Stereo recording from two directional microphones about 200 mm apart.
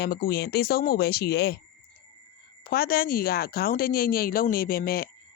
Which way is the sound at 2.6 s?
50° left (ahead or behind).